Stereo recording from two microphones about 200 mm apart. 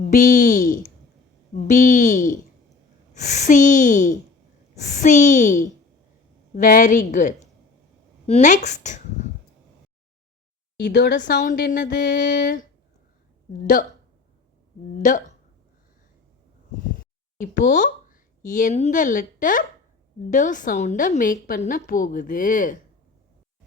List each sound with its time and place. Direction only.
0.0 s a sound: 40° left (ahead or behind)
1.5 s a woman's voice: 40° left (ahead or behind)
10.8 s a woman's voice: 55° left (ahead or behind)
14.9 s a woman's voice: 40° left (ahead or behind)
17.7 s a woman's voice: 40° left (ahead or behind)